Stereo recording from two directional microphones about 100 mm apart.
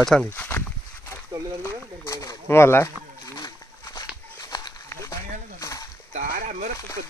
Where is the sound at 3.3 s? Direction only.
40° left (ahead or behind).